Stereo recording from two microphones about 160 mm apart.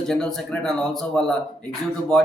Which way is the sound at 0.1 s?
5° left (ahead or behind).